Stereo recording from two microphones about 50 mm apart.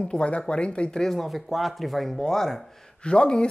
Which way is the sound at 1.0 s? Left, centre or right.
Centre.